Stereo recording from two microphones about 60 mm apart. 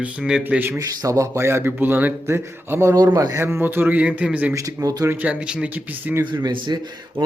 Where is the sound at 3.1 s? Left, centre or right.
Right.